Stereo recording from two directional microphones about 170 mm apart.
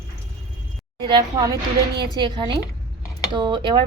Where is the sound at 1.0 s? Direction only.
25° right (ahead or behind).